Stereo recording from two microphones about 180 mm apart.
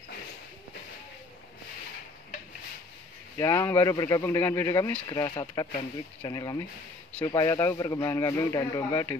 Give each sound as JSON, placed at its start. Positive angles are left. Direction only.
{"t": 3.3, "sound": "speech", "side_deg": 15}